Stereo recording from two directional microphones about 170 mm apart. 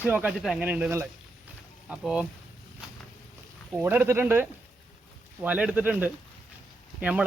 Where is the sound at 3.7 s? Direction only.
10° right (ahead or behind).